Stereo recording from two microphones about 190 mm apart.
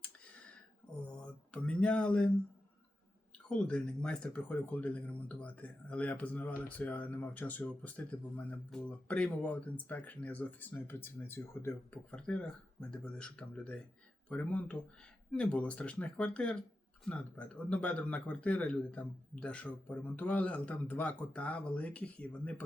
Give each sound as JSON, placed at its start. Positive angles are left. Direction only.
{"t": 0.0, "sound": "a sound", "side_deg": 5}
{"t": 1.5, "sound": "speech", "side_deg": 5}
{"t": 3.5, "sound": "speech", "side_deg": 5}